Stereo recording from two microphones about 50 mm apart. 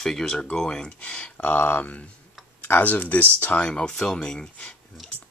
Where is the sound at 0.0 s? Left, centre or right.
Centre; by 1.6 s left.